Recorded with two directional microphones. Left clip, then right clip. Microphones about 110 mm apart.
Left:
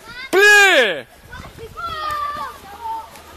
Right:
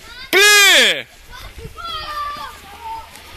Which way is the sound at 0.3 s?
Centre (ahead or behind).